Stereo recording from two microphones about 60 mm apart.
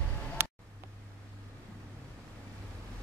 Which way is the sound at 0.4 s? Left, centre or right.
Right.